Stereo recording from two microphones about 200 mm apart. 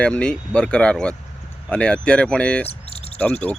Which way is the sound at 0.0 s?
5° left (ahead or behind).